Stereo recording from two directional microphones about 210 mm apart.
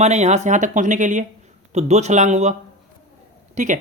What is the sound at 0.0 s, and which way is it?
Speech, 30° right (ahead or behind).